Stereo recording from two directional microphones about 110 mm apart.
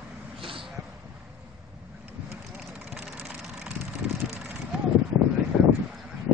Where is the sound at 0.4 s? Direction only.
55° right (ahead or behind).